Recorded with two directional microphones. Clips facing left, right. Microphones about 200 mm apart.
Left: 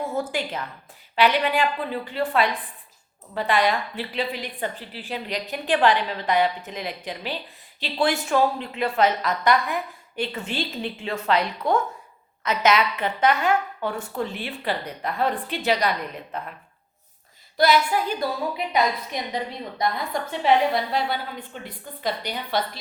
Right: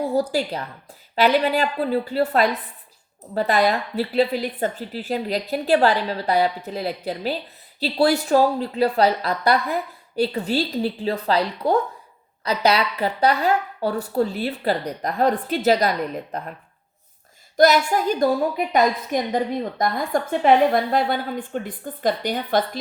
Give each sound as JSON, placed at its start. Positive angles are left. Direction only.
{"t": 0.0, "sound": "a woman's voice", "side_deg": -40}
{"t": 17.6, "sound": "a woman's voice", "side_deg": -45}